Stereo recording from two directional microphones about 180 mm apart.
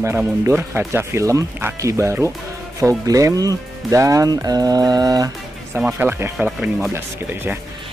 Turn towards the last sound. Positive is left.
turn(degrees=-10)  # may be behind; listen again after turning